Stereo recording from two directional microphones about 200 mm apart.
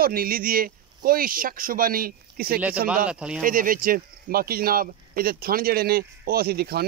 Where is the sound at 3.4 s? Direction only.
45° right (ahead or behind).